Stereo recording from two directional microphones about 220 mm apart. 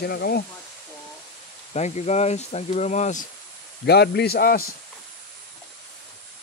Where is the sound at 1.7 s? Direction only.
30° left (ahead or behind).